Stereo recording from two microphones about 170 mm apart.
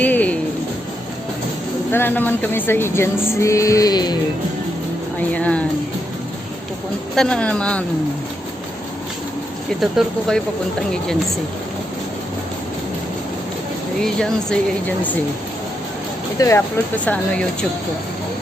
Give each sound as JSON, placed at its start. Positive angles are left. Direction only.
{"t": 0.0, "sound": "music", "side_deg": 10}
{"t": 1.9, "sound": "speech", "side_deg": 10}
{"t": 5.3, "sound": "speech", "side_deg": 5}
{"t": 7.2, "sound": "speech", "side_deg": 5}
{"t": 9.8, "sound": "speech", "side_deg": 0}
{"t": 14.0, "sound": "speech", "side_deg": 5}
{"t": 16.4, "sound": "speech", "side_deg": 20}
{"t": 17.1, "sound": "speech", "side_deg": 5}